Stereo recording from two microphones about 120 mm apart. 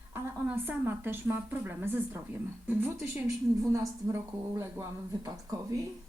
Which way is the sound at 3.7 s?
25° right (ahead or behind).